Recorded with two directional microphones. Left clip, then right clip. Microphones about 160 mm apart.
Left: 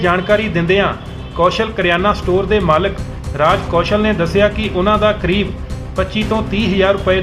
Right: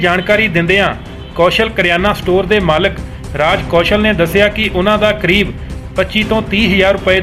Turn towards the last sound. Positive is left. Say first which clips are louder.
# right 3 dB
turn(degrees=-20)  # may be behind; listen again after turning